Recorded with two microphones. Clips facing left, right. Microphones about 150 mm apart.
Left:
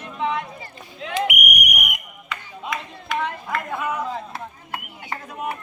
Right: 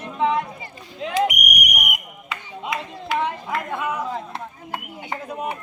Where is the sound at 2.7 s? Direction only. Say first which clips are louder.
Right 2 dB; 30° right (ahead or behind).